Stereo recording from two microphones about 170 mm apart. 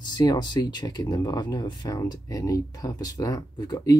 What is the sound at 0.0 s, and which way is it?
Speech, 25° left (ahead or behind).